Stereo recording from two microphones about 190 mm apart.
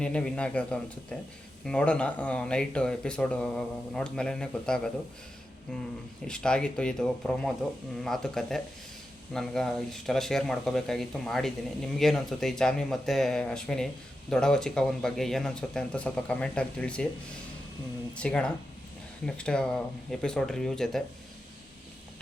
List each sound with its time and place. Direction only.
0.0 s speech: 5° left (ahead or behind)
6.2 s speech: 5° left (ahead or behind)
18.2 s speech: 5° left (ahead or behind)